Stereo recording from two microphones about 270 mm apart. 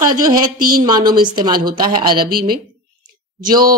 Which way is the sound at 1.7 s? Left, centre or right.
Right.